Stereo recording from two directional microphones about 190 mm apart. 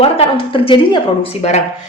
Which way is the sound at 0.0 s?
30° left (ahead or behind).